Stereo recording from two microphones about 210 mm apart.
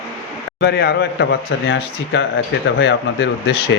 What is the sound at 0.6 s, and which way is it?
A man's voice, 50° left (ahead or behind).